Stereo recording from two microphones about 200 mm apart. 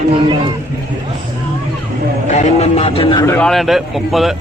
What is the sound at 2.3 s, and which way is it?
Speech, 35° left (ahead or behind).